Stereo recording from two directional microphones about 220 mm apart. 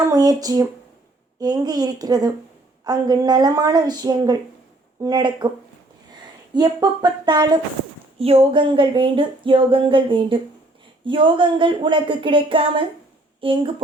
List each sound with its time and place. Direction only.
0.1 s a woman's voice: 15° right (ahead or behind)
6.5 s speech: 20° right (ahead or behind)